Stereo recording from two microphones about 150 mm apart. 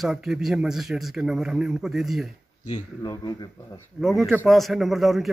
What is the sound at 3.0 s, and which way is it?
Speech, 25° left (ahead or behind).